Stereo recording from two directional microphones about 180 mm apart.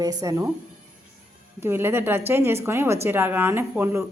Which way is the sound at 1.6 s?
15° right (ahead or behind).